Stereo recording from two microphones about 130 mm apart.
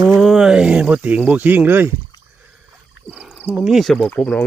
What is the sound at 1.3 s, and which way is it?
Speech, 10° right (ahead or behind).